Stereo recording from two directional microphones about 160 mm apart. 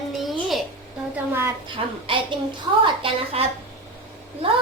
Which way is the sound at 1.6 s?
30° right (ahead or behind).